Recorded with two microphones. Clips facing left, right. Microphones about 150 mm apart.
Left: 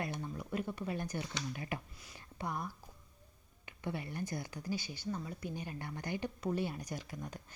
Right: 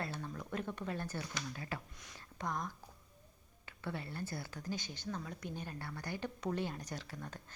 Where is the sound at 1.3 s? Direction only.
20° left (ahead or behind).